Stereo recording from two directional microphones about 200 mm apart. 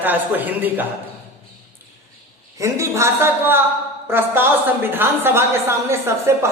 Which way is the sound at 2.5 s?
15° right (ahead or behind).